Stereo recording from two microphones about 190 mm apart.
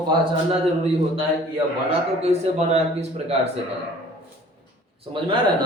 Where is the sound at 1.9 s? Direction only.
35° right (ahead or behind).